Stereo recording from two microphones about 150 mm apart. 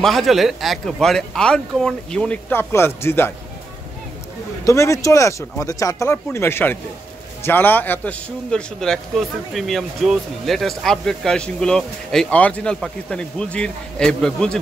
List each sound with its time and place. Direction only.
0.0 s a man's voice: centre (ahead or behind)
4.6 s a man's voice: 20° left (ahead or behind); by 14.6 s 5° left (ahead or behind)